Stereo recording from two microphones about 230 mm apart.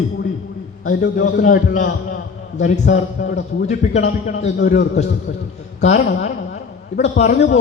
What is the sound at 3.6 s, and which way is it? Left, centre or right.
Speech, left.